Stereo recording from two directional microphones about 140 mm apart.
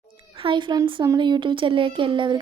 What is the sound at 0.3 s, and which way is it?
A woman's voice, 35° right (ahead or behind).